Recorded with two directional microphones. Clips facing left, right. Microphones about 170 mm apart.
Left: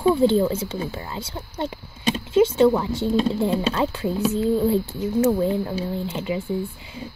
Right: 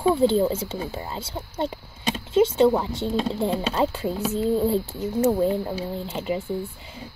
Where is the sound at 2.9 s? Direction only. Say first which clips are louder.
Left 4 dB; centre (ahead or behind).